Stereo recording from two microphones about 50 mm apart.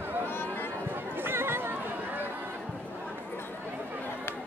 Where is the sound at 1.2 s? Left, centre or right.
Right.